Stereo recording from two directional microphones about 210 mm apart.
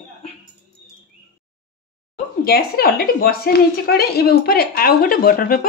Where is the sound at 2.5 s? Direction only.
45° left (ahead or behind).